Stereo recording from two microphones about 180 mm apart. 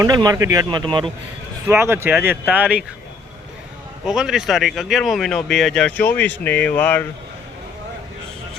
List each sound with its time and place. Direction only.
0.0 s speech: 20° right (ahead or behind)
1.6 s speech: 15° right (ahead or behind)
4.0 s speech: 5° right (ahead or behind)